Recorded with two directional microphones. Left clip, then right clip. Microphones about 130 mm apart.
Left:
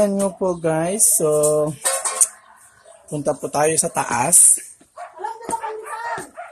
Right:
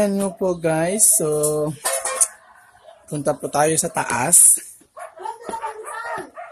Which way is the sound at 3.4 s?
15° right (ahead or behind).